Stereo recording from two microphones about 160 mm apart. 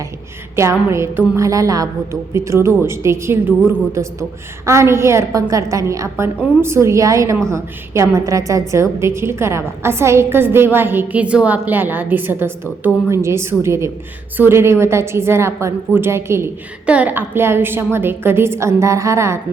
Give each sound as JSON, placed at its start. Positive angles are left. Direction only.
{"t": 0.5, "sound": "a woman's voice", "side_deg": -15}